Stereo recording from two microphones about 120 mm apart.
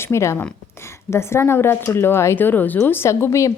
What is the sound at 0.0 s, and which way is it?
A woman's voice, 25° left (ahead or behind).